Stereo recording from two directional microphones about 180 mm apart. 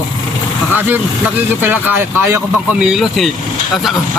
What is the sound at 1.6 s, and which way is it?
Speech, 10° right (ahead or behind).